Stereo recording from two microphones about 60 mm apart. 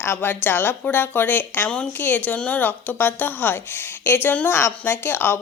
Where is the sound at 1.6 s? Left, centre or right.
Centre.